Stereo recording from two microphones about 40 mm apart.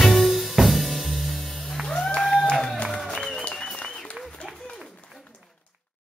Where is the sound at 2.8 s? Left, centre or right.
Left.